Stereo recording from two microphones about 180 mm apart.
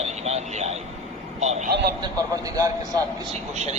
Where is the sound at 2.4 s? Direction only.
20° right (ahead or behind).